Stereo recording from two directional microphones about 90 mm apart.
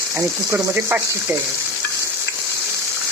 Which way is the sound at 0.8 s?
30° right (ahead or behind).